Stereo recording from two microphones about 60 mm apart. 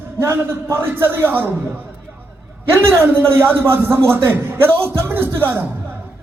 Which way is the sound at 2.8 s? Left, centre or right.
Right.